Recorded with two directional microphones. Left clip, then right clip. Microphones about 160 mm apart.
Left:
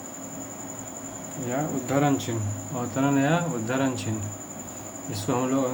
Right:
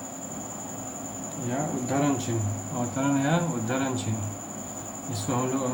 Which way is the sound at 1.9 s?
55° left (ahead or behind).